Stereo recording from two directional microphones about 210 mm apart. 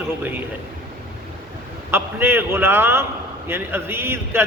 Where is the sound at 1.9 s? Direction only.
10° right (ahead or behind).